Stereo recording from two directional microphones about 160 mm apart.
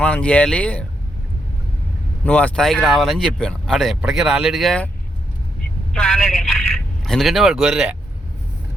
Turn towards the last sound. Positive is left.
turn(degrees=-5)  # may be behind; listen again after turning